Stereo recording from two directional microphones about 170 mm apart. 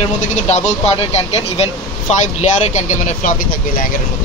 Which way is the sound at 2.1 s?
40° left (ahead or behind).